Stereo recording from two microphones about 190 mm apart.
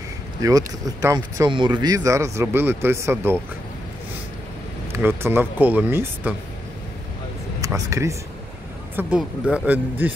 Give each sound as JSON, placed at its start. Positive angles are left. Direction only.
{"t": 0.4, "sound": "speech", "side_deg": -20}
{"t": 4.9, "sound": "speech", "side_deg": -10}
{"t": 7.6, "sound": "speech", "side_deg": -15}